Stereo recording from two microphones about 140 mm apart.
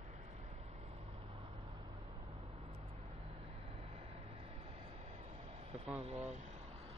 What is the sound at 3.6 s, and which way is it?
Vehicle, 45° right (ahead or behind).